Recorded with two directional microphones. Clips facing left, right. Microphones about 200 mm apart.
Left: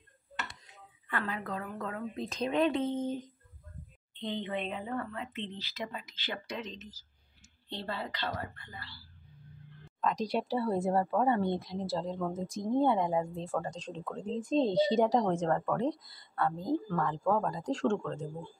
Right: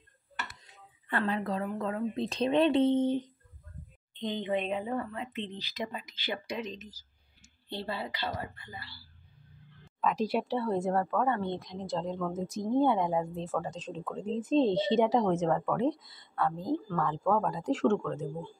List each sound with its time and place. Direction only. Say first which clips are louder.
1.0 s a woman's voice: right 5 dB; 35° right (ahead or behind)
4.1 s speech: right 4 dB; 15° right (ahead or behind)
10.0 s a woman's voice: right 2 dB; 5° right (ahead or behind)